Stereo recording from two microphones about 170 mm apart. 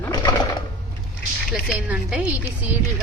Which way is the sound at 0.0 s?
20° left (ahead or behind).